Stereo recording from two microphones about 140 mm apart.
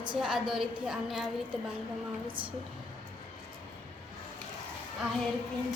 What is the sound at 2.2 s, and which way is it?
Speech, 35° right (ahead or behind).